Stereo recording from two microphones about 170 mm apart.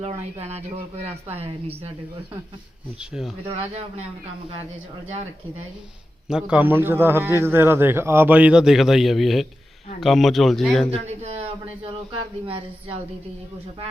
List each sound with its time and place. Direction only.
0.0 s speech: 40° right (ahead or behind)
3.0 s a man's voice: 5° right (ahead or behind)
6.2 s a man's voice: 5° right (ahead or behind)
10.9 s speech: 35° right (ahead or behind)